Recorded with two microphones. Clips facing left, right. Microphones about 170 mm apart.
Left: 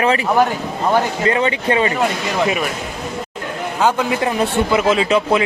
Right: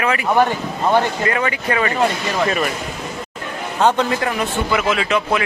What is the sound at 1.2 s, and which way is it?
Speech, 25° left (ahead or behind).